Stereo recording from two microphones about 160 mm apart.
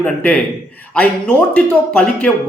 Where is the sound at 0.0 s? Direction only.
10° left (ahead or behind).